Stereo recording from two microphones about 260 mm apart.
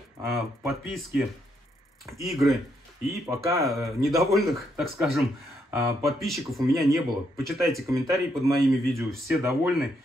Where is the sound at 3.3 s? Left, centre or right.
Centre.